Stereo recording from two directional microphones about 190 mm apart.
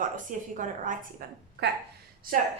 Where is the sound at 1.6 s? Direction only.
65° right (ahead or behind).